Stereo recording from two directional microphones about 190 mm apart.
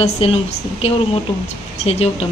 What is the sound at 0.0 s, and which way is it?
Speech, 35° left (ahead or behind).